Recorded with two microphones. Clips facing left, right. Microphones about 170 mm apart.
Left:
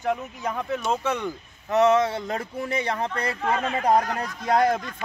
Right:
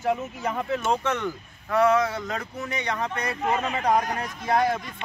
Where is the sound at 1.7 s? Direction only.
25° left (ahead or behind).